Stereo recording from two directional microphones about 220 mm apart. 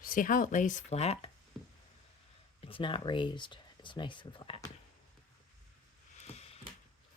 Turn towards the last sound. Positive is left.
turn(degrees=30)  # may be behind; listen again after turning